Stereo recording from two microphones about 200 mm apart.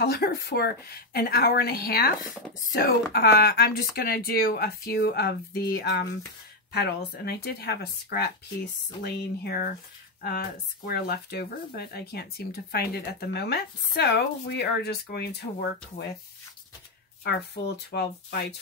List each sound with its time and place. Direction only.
0.0 s speech: 50° left (ahead or behind)
10.9 s speech: 55° left (ahead or behind)
17.2 s speech: 55° left (ahead or behind)